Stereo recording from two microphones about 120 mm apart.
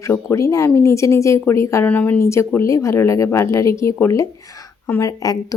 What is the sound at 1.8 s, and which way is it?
A woman's voice, 15° left (ahead or behind).